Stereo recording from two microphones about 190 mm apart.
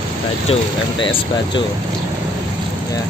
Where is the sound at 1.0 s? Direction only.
25° left (ahead or behind).